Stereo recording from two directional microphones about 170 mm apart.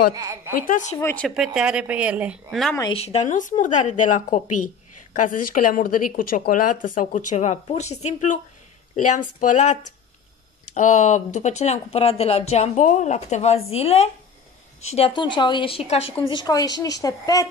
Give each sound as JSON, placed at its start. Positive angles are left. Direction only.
{"t": 0.1, "sound": "a woman's voice", "side_deg": -20}
{"t": 0.6, "sound": "speech", "side_deg": 50}
{"t": 0.9, "sound": "speech", "side_deg": 10}
{"t": 1.3, "sound": "speech", "side_deg": -5}
{"t": 2.9, "sound": "speech", "side_deg": 35}
{"t": 16.3, "sound": "speech", "side_deg": 25}